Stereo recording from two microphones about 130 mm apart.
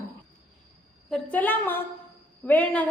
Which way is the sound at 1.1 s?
10° left (ahead or behind).